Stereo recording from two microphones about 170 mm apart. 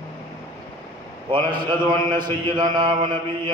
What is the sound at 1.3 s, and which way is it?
A man's voice, 25° right (ahead or behind).